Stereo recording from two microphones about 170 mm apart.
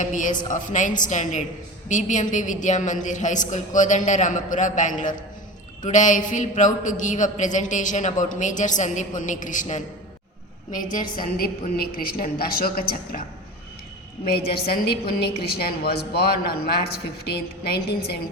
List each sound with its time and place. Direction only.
0.0 s a man's voice: 50° left (ahead or behind)
14.3 s a woman's voice: 65° left (ahead or behind)